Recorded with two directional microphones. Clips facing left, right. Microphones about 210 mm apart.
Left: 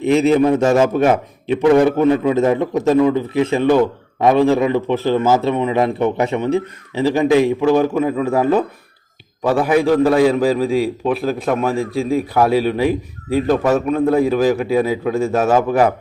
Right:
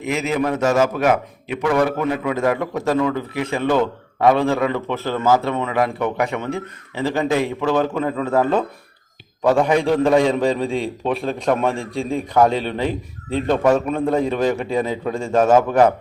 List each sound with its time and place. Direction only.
0.0 s a man's voice: 30° left (ahead or behind); by 15.9 s 5° left (ahead or behind)